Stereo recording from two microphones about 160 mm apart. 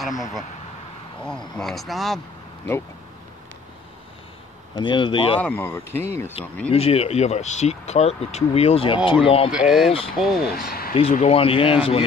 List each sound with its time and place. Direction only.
1.2 s speech: 5° left (ahead or behind)
4.7 s speech: 30° left (ahead or behind)
5.4 s speech: 15° left (ahead or behind)
6.7 s speech: 40° left (ahead or behind)
9.5 s speech: 5° right (ahead or behind)
10.5 s speech: 70° left (ahead or behind)
11.1 s speech: 40° left (ahead or behind)